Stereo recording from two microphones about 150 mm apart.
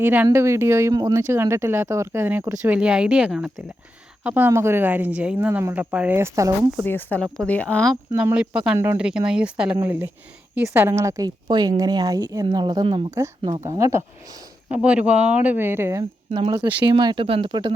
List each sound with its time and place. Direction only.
0.0 s speech: 10° right (ahead or behind)
2.6 s speech: 10° right (ahead or behind)
6.8 s speech: 10° left (ahead or behind)
8.2 s speech: 5° right (ahead or behind)
14.7 s speech: 10° right (ahead or behind)
16.3 s speech: 35° right (ahead or behind)